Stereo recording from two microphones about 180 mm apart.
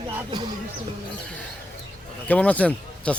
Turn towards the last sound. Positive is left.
turn(degrees=5)  # may be behind; listen again after turning